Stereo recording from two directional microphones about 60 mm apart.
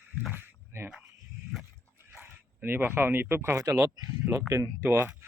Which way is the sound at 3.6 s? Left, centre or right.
Right.